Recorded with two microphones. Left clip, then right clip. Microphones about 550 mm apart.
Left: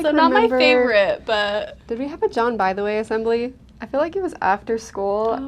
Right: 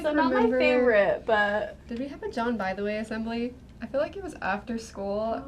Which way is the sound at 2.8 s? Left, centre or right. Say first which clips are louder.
Left 10 dB; left.